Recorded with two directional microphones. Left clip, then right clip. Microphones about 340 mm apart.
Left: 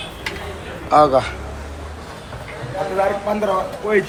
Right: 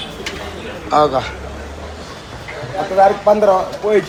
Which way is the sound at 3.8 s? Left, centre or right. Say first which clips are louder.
Right 3 dB; centre.